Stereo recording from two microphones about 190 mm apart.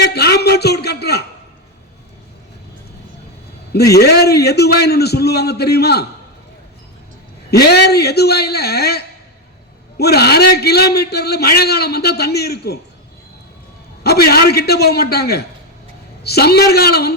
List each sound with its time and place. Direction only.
0.0 s a man's voice: 60° left (ahead or behind)
3.9 s a man's voice: 55° left (ahead or behind)
7.5 s a man's voice: 60° left (ahead or behind)
14.0 s a man's voice: 55° left (ahead or behind)